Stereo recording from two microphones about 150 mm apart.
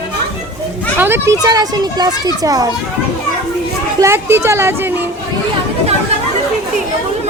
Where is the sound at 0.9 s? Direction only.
15° right (ahead or behind).